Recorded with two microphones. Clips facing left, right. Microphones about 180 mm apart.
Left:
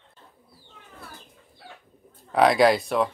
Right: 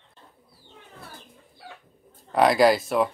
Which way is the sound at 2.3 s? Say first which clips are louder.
Even; centre (ahead or behind).